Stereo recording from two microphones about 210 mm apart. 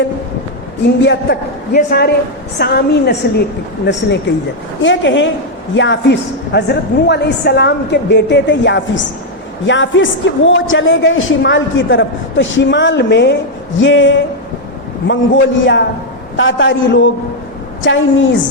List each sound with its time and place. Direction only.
1.0 s a man's voice: 50° left (ahead or behind)
4.8 s speech: 60° left (ahead or behind)